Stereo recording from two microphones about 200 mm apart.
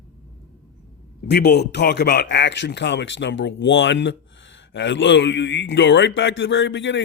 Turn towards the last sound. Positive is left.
turn(degrees=65)  # may be behind; listen again after turning